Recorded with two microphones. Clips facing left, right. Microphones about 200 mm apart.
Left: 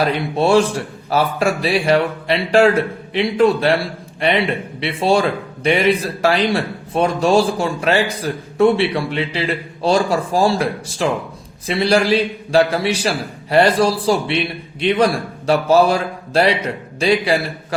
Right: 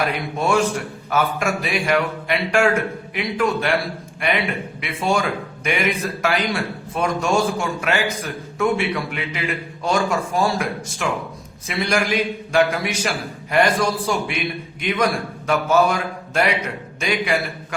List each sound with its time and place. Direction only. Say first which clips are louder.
0.0 s a man's voice: left 5 dB; 30° left (ahead or behind)